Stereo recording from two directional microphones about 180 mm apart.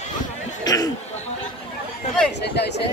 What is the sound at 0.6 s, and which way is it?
Chatter, 20° left (ahead or behind).